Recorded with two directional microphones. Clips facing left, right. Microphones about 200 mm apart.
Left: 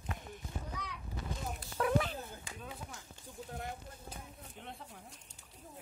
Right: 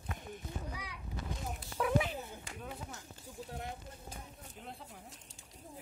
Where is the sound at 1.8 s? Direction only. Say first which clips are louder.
Even; 5° right (ahead or behind).